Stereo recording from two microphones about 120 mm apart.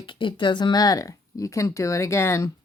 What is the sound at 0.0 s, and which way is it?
Speech, 45° left (ahead or behind).